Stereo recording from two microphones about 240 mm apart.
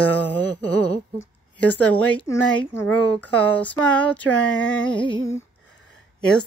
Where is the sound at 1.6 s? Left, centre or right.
Centre.